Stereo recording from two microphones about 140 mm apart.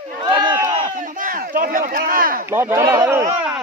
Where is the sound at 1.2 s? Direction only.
85° right.